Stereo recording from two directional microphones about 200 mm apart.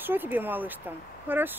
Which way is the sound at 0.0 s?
10° right (ahead or behind).